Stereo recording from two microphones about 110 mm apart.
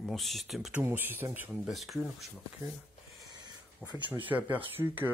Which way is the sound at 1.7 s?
Centre (ahead or behind).